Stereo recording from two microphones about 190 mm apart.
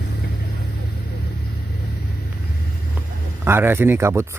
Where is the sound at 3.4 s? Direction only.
10° right (ahead or behind).